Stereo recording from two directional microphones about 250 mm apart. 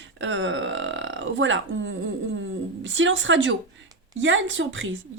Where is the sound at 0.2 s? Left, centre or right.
Right.